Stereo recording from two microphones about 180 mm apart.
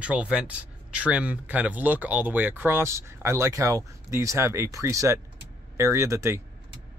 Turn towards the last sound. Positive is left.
turn(degrees=-15)  # may be behind; listen again after turning